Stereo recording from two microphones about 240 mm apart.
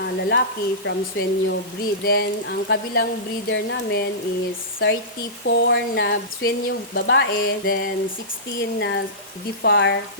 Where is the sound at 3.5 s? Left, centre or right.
Left.